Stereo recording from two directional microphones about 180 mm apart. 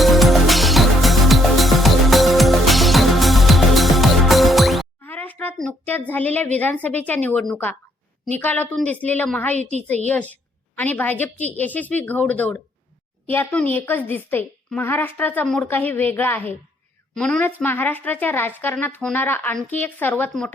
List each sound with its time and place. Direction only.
0.0 s music: centre (ahead or behind)
6.6 s a woman's voice: 10° left (ahead or behind)
9.6 s a woman's voice: 40° right (ahead or behind)
10.1 s a woman's voice: 10° left (ahead or behind)